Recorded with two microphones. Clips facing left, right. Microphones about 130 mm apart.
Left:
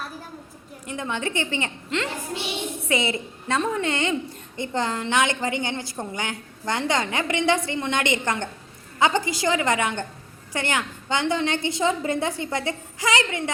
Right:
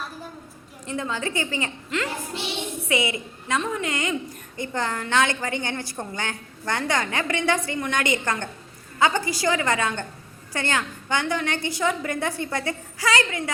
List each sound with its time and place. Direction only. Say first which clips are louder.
0.9 s a woman's voice: even; 20° left (ahead or behind)